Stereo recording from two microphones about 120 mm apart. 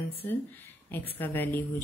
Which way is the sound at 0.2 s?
20° left (ahead or behind).